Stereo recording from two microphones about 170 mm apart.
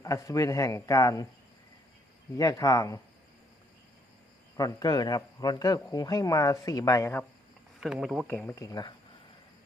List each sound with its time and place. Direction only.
0.0 s a man's voice: 20° left (ahead or behind)
2.4 s a man's voice: 20° left (ahead or behind)
4.5 s a man's voice: 20° left (ahead or behind)
7.8 s speech: 5° right (ahead or behind)
8.3 s a man's voice: 10° left (ahead or behind)